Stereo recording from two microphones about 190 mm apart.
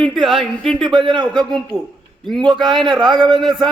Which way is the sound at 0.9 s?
25° right (ahead or behind).